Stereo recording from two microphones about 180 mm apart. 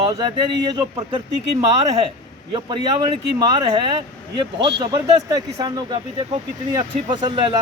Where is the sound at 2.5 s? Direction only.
25° right (ahead or behind).